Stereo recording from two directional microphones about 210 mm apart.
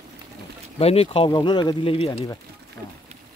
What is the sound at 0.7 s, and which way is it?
Speech, 30° left (ahead or behind).